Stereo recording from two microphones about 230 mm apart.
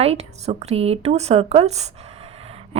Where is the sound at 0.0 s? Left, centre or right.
Right.